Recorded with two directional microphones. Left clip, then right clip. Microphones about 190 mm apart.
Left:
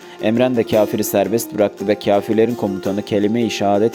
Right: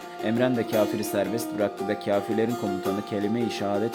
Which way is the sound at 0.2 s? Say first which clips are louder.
Left 9 dB; 35° left (ahead or behind).